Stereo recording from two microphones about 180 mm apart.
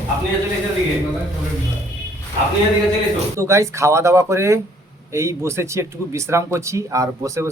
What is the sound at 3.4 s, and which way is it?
Speech, 15° right (ahead or behind).